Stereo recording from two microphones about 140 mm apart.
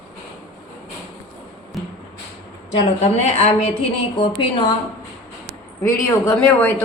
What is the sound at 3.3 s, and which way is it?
A woman's voice, 45° left (ahead or behind).